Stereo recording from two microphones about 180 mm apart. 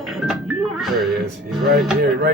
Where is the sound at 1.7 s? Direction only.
Centre (ahead or behind).